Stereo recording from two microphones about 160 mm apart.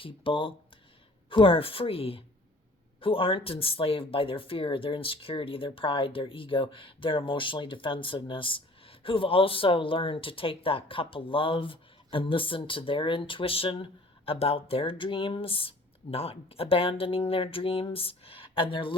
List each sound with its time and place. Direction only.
0.0 s speech: 35° left (ahead or behind)